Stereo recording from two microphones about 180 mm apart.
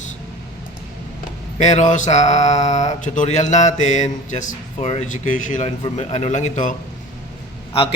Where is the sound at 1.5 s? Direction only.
40° left (ahead or behind).